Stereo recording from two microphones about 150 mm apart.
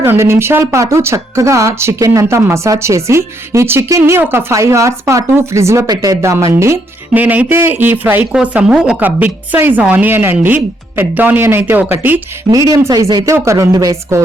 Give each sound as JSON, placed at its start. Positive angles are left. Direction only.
{"t": 0.0, "sound": "speech", "side_deg": -15}